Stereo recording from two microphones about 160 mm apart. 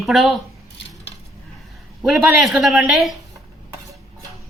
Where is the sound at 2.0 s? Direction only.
Centre (ahead or behind).